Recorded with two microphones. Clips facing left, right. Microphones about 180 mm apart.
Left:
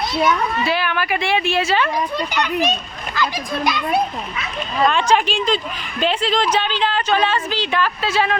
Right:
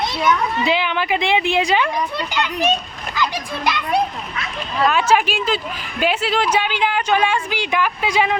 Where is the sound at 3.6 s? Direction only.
Centre (ahead or behind).